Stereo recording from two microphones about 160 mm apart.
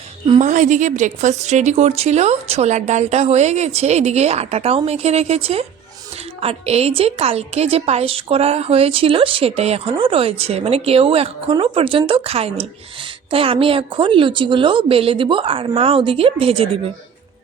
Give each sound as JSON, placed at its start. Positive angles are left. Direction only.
{"t": 0.3, "sound": "a woman's voice", "side_deg": -50}